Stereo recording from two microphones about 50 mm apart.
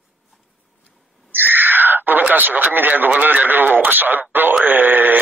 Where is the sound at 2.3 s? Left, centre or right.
Right.